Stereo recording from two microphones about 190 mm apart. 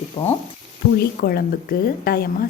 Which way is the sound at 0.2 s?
25° left (ahead or behind).